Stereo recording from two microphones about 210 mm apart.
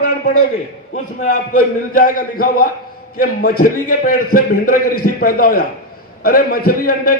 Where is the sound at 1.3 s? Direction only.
40° left (ahead or behind).